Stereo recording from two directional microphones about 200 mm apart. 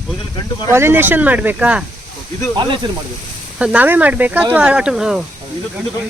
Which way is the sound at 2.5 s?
20° right (ahead or behind).